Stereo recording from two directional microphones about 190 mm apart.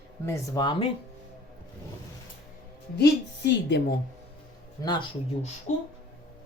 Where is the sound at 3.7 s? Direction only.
60° left (ahead or behind).